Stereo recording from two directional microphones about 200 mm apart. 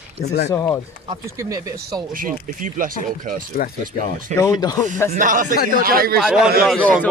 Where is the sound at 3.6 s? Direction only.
45° left (ahead or behind).